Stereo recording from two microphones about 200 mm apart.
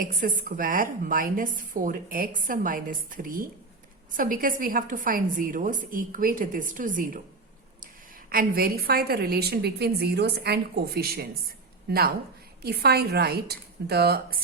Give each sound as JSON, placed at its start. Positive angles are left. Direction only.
{"t": 0.0, "sound": "a woman's voice", "side_deg": -40}
{"t": 8.3, "sound": "a woman's voice", "side_deg": -45}